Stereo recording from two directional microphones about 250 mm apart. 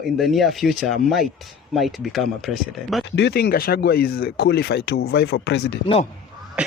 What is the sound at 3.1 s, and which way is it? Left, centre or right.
Speech, left.